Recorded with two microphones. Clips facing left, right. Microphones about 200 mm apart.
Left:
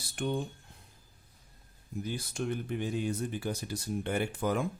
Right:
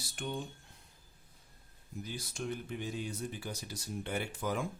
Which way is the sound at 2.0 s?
55° left (ahead or behind).